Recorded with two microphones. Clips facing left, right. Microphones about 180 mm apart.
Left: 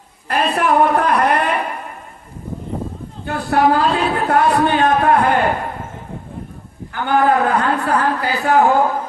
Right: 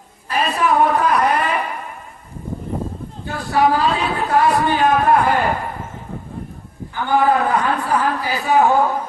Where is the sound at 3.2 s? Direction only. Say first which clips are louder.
Left 2 dB; 60° left (ahead or behind).